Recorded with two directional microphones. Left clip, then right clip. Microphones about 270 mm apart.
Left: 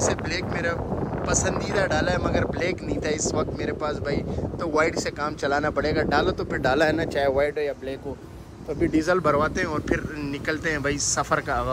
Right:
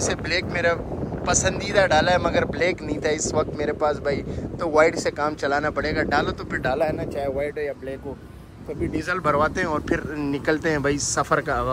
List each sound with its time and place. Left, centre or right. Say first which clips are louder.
0.0 s speech: right 1 dB; centre
6.6 s speech: left 2 dB; left
7.3 s speech: left 3 dB; left
9.2 s speech: right 1 dB; centre